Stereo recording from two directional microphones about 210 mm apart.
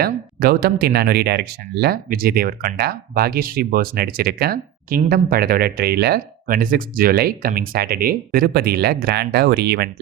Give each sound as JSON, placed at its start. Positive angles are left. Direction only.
{"t": 0.0, "sound": "speech", "side_deg": -45}